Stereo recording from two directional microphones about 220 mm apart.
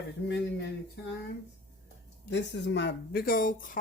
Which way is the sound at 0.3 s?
50° left (ahead or behind).